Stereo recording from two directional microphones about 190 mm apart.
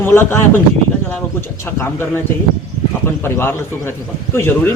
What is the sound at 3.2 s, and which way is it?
Speech, 10° left (ahead or behind).